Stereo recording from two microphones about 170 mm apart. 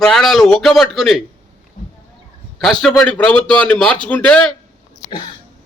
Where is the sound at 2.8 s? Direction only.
5° left (ahead or behind).